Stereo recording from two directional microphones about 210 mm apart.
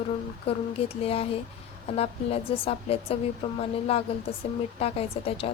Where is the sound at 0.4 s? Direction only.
30° left (ahead or behind).